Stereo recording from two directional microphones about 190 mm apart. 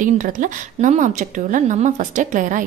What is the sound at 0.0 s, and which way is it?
Speech, 45° right (ahead or behind).